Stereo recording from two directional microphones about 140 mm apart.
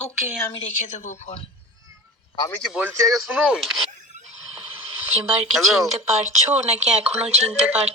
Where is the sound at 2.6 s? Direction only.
10° right (ahead or behind).